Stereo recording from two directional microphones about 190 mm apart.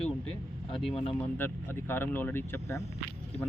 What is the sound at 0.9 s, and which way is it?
Speech, 30° left (ahead or behind).